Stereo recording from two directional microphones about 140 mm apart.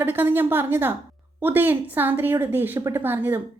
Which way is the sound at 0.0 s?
15° right (ahead or behind).